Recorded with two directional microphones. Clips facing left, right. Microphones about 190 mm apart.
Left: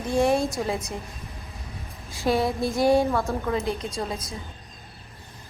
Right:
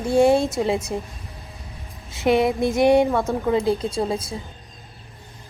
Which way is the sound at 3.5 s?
30° right (ahead or behind).